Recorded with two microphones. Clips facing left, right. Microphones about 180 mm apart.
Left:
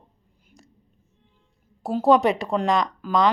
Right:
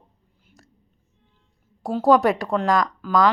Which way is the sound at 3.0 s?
20° left (ahead or behind).